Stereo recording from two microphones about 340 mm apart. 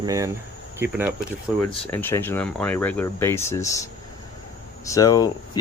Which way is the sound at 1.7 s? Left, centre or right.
Centre.